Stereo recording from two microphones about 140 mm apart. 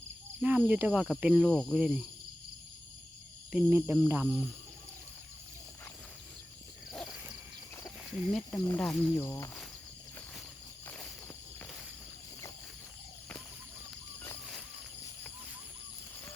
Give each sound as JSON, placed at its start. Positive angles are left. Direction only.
{"t": 0.4, "sound": "speech", "side_deg": -10}
{"t": 1.5, "sound": "cricket", "side_deg": 5}
{"t": 3.5, "sound": "speech", "side_deg": -15}
{"t": 6.9, "sound": "a sound", "side_deg": 5}
{"t": 8.0, "sound": "speech", "side_deg": 0}
{"t": 8.4, "sound": "speech", "side_deg": 20}
{"t": 8.8, "sound": "cricket", "side_deg": 5}
{"t": 9.2, "sound": "speech", "side_deg": 15}
{"t": 10.8, "sound": "walk", "side_deg": 10}